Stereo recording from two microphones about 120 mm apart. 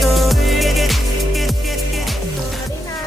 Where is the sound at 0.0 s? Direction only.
Centre (ahead or behind).